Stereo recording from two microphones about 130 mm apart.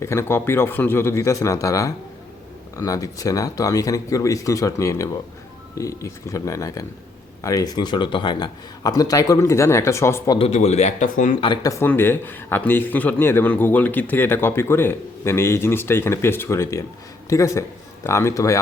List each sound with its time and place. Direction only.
0.0 s a man's voice: 20° left (ahead or behind)
10.3 s speech: 50° left (ahead or behind)
11.0 s speech: 80° left
11.3 s speech: 40° left (ahead or behind)
11.9 s a man's voice: 15° left (ahead or behind)